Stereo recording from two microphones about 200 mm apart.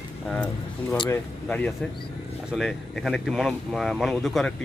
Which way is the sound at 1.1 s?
5° left (ahead or behind).